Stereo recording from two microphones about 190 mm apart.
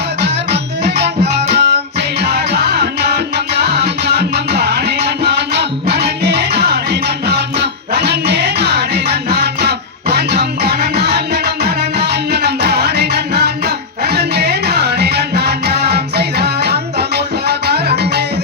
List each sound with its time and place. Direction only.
0.2 s music: 60° right (ahead or behind)